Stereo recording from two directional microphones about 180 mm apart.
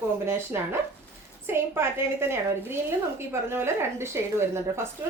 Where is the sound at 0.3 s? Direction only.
15° right (ahead or behind).